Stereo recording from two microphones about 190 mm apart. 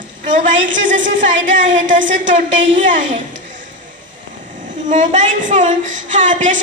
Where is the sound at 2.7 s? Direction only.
45° right (ahead or behind).